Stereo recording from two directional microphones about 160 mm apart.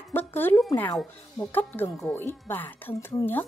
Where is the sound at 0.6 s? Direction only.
20° left (ahead or behind).